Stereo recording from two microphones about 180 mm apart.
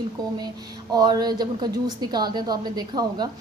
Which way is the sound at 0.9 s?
20° right (ahead or behind).